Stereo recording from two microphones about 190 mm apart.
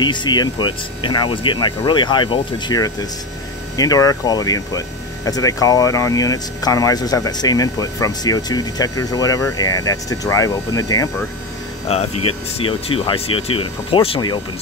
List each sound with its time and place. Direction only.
0.0 s speech: 25° left (ahead or behind)
11.9 s speech: 35° left (ahead or behind)